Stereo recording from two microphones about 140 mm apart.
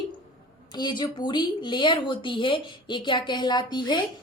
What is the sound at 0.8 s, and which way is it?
A woman's voice, 30° left (ahead or behind).